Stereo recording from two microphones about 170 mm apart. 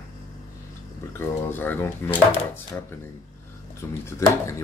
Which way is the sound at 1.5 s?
10° left (ahead or behind).